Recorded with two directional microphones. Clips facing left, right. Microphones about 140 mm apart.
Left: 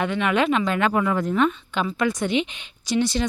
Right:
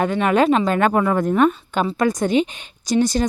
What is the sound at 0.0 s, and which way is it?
A woman's voice, 40° right (ahead or behind).